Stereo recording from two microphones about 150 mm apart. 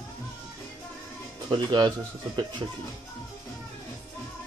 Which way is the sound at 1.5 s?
30° right (ahead or behind).